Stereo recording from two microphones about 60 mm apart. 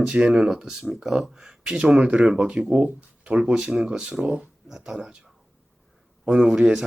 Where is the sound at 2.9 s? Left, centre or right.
Right.